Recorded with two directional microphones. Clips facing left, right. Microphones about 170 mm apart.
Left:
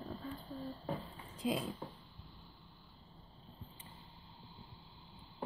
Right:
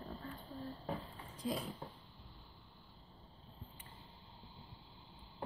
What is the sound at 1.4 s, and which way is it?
Speech, 20° left (ahead or behind).